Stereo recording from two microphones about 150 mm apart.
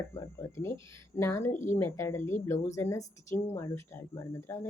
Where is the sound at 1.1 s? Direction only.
15° left (ahead or behind).